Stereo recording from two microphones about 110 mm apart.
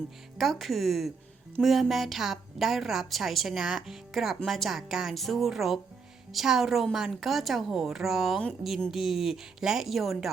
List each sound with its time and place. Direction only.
0.3 s a woman's voice: centre (ahead or behind)